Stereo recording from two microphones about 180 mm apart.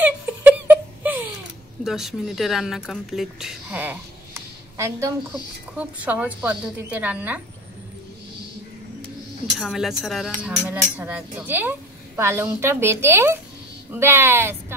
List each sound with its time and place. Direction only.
0.0 s laughter: 10° right (ahead or behind)
1.9 s a woman's voice: centre (ahead or behind)
9.6 s a woman's voice: centre (ahead or behind)